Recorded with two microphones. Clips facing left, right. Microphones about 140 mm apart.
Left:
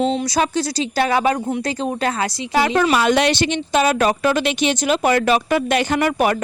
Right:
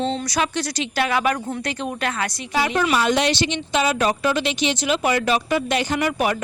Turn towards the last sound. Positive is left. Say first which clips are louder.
# left 4 dB
turn(degrees=50)  # may be behind; listen again after turning